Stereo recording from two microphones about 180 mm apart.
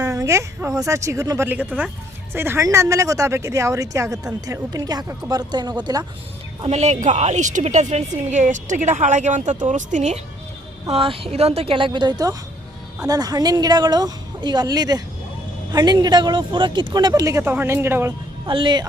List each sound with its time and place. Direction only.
0.0 s speech: 15° right (ahead or behind)
6.6 s a woman's voice: 35° right (ahead or behind)
10.8 s speech: 30° right (ahead or behind); by 18.1 s 10° right (ahead or behind)
18.4 s speech: 25° right (ahead or behind)